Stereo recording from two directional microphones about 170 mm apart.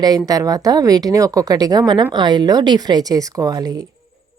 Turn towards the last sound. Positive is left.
turn(degrees=-20)  # may be behind; listen again after turning